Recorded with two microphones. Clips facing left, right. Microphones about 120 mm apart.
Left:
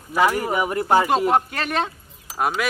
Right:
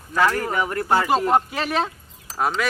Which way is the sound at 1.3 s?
Centre (ahead or behind).